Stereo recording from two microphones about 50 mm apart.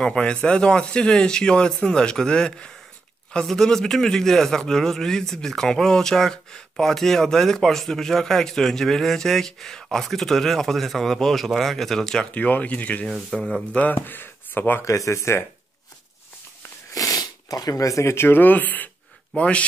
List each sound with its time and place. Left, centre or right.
0.0 s a man's voice: centre
12.3 s speech: left
13.3 s a man's voice: centre
13.9 s speech: left
14.9 s speech: left
17.8 s speech: left
18.2 s speech: left
19.3 s speech: left